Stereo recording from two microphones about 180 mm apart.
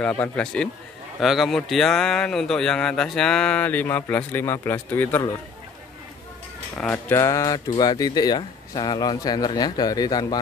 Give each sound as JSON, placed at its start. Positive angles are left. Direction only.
{"t": 0.0, "sound": "a man's voice", "side_deg": 5}
{"t": 6.8, "sound": "speech", "side_deg": 10}